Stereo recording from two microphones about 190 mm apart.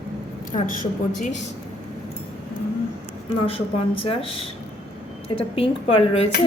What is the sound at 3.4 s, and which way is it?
Speech, 30° left (ahead or behind).